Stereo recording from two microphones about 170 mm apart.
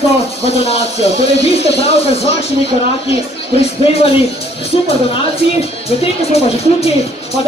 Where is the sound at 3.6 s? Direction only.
35° left (ahead or behind).